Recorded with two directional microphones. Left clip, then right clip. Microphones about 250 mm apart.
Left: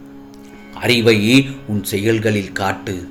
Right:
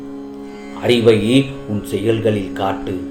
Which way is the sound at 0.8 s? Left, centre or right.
Left.